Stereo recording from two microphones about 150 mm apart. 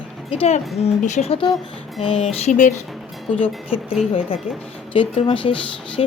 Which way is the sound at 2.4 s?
55° left (ahead or behind).